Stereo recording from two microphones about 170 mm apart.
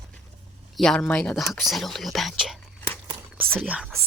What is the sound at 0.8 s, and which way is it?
Speech, 5° left (ahead or behind).